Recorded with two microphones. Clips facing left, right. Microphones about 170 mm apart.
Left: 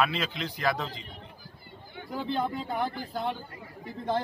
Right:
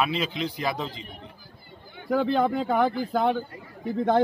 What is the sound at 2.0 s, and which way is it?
A man's voice, 70° right (ahead or behind).